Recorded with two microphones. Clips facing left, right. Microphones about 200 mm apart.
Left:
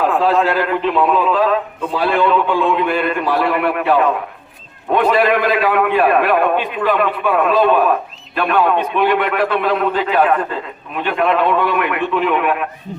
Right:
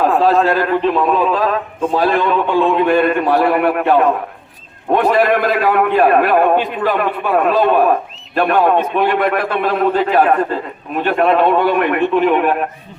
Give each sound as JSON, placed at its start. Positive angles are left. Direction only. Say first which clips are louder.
{"t": 0.3, "sound": "a man's voice", "louder": "right 2 dB", "side_deg": -40}